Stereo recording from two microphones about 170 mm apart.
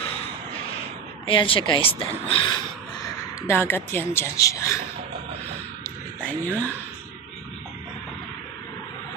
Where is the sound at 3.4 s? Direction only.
15° left (ahead or behind).